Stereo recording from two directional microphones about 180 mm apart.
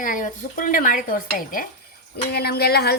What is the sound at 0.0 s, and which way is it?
A woman's voice, 50° left (ahead or behind).